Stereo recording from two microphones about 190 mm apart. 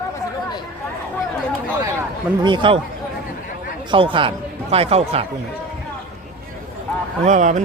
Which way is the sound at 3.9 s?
25° right (ahead or behind).